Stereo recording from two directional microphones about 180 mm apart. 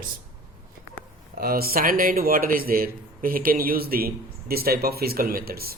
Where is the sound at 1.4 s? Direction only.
55° right (ahead or behind).